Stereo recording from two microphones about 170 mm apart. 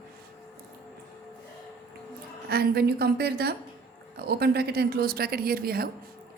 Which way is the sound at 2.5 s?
65° right (ahead or behind).